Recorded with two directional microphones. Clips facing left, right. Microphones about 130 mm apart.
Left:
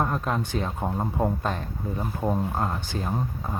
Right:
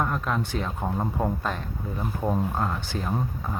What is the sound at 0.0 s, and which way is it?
Speech, 25° left (ahead or behind).